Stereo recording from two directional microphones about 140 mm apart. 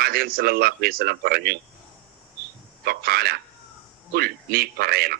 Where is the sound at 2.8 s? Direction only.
90° right.